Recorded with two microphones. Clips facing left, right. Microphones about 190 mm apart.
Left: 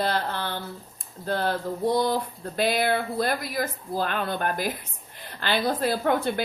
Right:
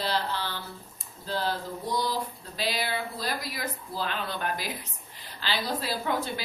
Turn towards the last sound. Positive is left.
turn(degrees=55)  # may be behind; listen again after turning